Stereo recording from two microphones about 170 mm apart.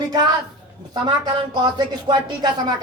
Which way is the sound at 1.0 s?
25° right (ahead or behind).